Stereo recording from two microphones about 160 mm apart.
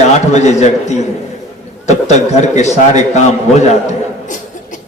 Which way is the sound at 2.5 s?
45° left (ahead or behind).